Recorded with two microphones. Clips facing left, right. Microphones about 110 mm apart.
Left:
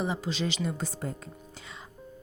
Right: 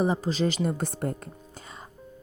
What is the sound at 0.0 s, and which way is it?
Speech, 40° right (ahead or behind).